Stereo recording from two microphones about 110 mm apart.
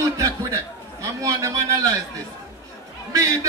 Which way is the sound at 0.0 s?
30° right (ahead or behind).